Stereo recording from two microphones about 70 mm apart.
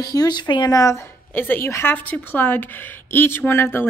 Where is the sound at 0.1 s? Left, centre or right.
Left.